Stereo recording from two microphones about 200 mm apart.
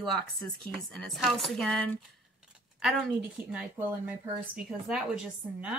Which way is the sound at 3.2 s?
5° right (ahead or behind).